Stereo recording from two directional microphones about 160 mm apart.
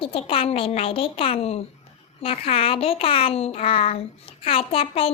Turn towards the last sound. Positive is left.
turn(degrees=35)  # may be behind; listen again after turning